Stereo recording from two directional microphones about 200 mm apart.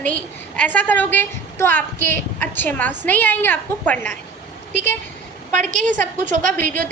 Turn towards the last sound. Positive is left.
turn(degrees=10)  # may be behind; listen again after turning